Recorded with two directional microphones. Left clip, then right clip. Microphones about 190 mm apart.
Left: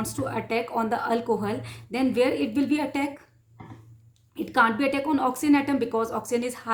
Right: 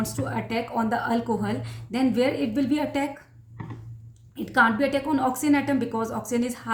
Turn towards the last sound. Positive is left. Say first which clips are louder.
# left 1 dB
turn(degrees=25)  # may be behind; listen again after turning